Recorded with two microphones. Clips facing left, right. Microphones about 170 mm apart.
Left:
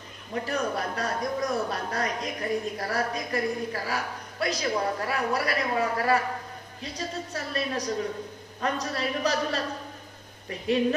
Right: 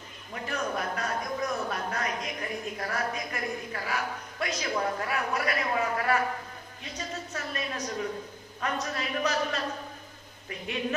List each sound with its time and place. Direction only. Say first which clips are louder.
0.3 s speech: left 4 dB; 35° left (ahead or behind)